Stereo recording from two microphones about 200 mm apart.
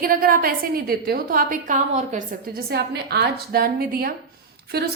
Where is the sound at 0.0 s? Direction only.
45° right (ahead or behind).